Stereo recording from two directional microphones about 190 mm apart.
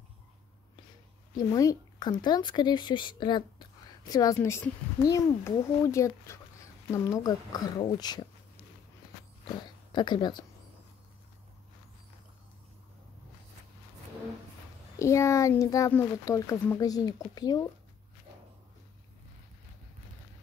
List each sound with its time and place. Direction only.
1.5 s speech: 20° left (ahead or behind)
9.9 s speech: 25° left (ahead or behind)
15.0 s speech: 15° left (ahead or behind)